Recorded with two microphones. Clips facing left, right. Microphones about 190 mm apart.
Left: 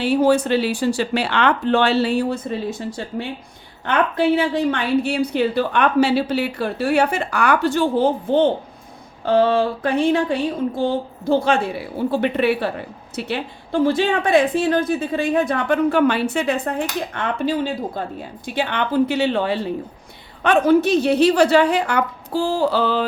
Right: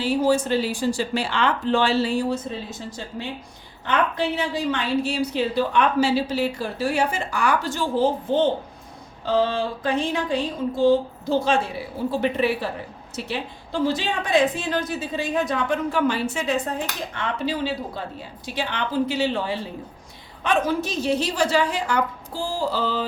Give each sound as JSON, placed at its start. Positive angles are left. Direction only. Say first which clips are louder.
{"t": 0.0, "sound": "a woman's voice", "louder": "left 4 dB", "side_deg": 60}